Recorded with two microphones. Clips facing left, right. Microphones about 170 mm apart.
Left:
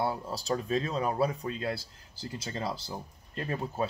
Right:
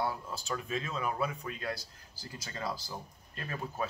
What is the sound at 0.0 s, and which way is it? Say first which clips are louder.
Speech: left 4 dB; 35° left (ahead or behind).